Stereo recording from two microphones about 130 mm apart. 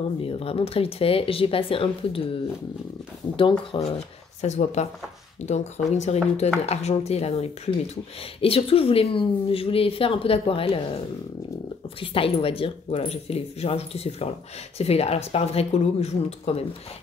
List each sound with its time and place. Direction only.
0.2 s speech: 50° left (ahead or behind)
3.3 s speech: 40° left (ahead or behind)
12.0 s speech: 45° left (ahead or behind)